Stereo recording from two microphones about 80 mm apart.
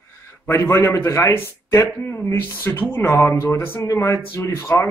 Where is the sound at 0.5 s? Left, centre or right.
Left.